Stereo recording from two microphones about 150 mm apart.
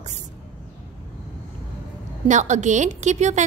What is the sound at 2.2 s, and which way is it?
A woman's voice, 55° right (ahead or behind).